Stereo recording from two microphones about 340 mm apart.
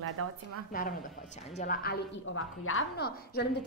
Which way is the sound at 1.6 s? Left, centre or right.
Left.